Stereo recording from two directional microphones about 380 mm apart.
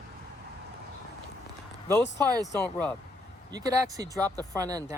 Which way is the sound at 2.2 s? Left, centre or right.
Centre.